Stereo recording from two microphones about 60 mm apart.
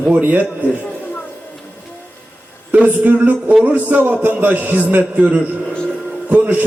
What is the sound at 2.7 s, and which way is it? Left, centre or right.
A man's voice, right.